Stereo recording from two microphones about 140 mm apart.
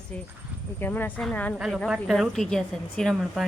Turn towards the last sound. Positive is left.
turn(degrees=0)  # may be behind; listen again after turning